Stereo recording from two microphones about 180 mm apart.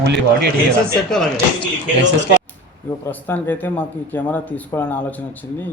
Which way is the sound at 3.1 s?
10° left (ahead or behind).